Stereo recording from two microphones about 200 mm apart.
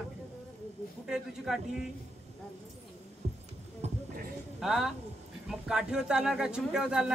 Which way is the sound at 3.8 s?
30° right (ahead or behind).